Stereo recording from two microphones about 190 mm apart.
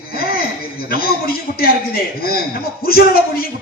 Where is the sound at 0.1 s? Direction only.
50° left (ahead or behind).